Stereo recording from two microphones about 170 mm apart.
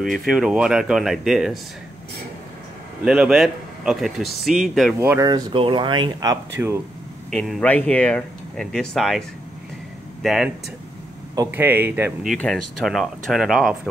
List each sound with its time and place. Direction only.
0.0 s speech: centre (ahead or behind)
3.1 s speech: 5° right (ahead or behind)
4.9 s speech: 15° right (ahead or behind)
5.3 s speech: 25° right (ahead or behind)
7.2 s speech: centre (ahead or behind)
10.2 s speech: centre (ahead or behind)
11.5 s speech: 10° right (ahead or behind)